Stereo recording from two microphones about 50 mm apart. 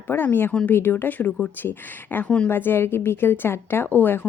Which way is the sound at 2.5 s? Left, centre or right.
Left.